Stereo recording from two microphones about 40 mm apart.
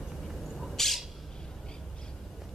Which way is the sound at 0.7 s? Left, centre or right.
Centre.